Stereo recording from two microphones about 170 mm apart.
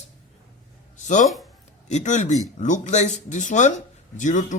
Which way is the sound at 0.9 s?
45° left (ahead or behind).